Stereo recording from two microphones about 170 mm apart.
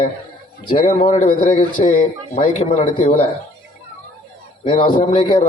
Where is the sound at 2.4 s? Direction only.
40° left (ahead or behind).